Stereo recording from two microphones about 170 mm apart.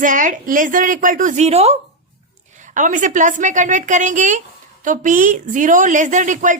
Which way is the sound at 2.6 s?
50° right (ahead or behind).